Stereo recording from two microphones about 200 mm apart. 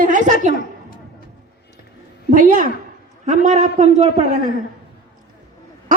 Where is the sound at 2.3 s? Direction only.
40° right (ahead or behind).